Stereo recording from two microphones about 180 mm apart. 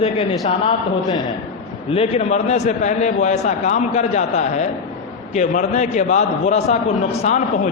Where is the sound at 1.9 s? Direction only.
35° left (ahead or behind).